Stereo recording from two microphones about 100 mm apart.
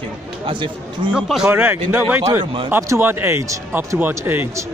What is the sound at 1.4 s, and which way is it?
Speech, 20° right (ahead or behind).